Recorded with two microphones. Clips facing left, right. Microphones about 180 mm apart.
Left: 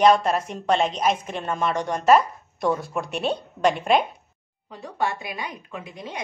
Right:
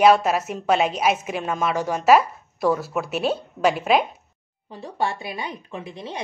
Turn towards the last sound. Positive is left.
turn(degrees=-30)  # may be behind; listen again after turning